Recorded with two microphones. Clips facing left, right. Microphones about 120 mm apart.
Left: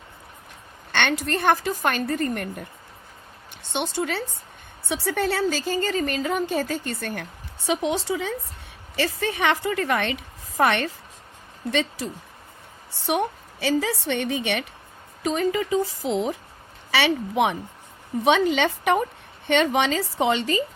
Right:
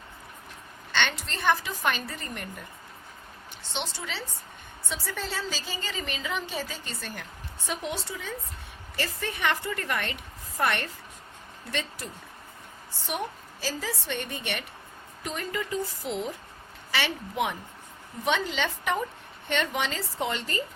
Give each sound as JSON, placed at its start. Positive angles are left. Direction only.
{"t": 0.9, "sound": "a woman's voice", "side_deg": 60}
{"t": 3.7, "sound": "speech", "side_deg": 55}
{"t": 4.9, "sound": "a woman's voice", "side_deg": 70}
{"t": 7.7, "sound": "a woman's voice", "side_deg": 90}
{"t": 13.1, "sound": "a woman's voice", "side_deg": 70}
{"t": 16.9, "sound": "a woman's voice", "side_deg": 90}
{"t": 18.3, "sound": "a woman's voice", "side_deg": 65}